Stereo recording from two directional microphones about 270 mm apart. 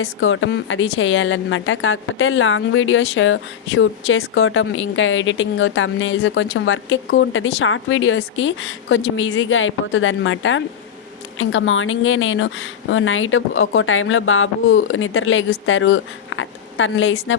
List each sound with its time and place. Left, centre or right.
0.0 s a woman's voice: left